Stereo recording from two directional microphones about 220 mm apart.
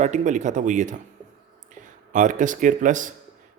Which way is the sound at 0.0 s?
35° right (ahead or behind).